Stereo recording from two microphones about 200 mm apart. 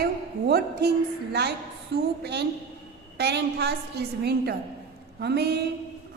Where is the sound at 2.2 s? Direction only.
55° right (ahead or behind).